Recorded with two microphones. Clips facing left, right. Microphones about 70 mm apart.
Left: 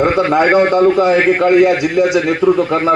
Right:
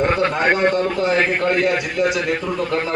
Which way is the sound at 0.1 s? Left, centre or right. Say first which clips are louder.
Left 6 dB; centre.